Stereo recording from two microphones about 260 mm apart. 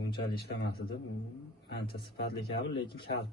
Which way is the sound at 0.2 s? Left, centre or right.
Left.